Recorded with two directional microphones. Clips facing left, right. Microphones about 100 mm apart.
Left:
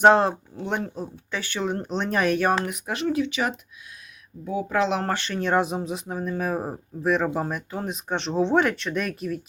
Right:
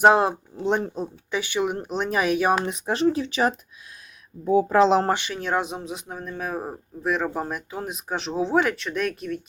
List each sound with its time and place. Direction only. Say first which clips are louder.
0.0 s speech: even; 10° right (ahead or behind)
2.6 s speech: right 4 dB; 30° right (ahead or behind)
5.0 s speech: right 3 dB; 15° right (ahead or behind)
5.3 s speech: left 3 dB; centre (ahead or behind)